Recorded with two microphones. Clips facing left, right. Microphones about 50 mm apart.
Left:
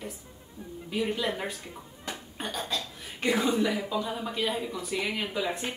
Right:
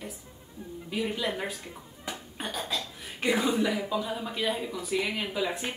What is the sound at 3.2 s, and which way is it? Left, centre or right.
A woman's voice, centre.